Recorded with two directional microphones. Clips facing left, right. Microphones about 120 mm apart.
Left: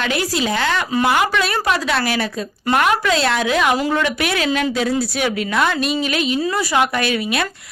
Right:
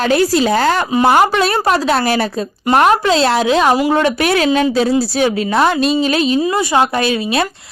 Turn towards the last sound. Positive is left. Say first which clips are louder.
# right 4 dB
turn(degrees=-25)  # may be behind; listen again after turning